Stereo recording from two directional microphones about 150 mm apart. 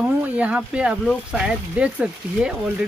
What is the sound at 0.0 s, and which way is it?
Speech, 10° right (ahead or behind).